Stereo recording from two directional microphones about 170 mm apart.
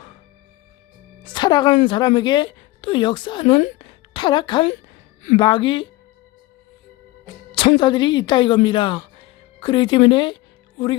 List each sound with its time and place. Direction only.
1.2 s a woman's voice: 25° left (ahead or behind)
7.5 s a woman's voice: 30° left (ahead or behind)